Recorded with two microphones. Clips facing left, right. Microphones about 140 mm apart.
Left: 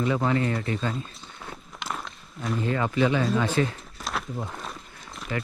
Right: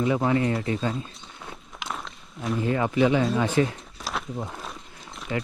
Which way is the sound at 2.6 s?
20° right (ahead or behind).